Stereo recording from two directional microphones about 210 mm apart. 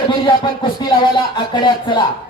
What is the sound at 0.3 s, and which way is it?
Music, 20° left (ahead or behind).